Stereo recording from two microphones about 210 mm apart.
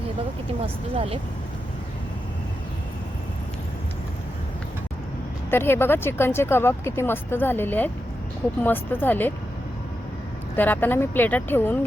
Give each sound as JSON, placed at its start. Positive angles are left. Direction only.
{"t": 0.6, "sound": "speech", "side_deg": -25}
{"t": 5.5, "sound": "speech", "side_deg": 10}
{"t": 10.5, "sound": "speech", "side_deg": 10}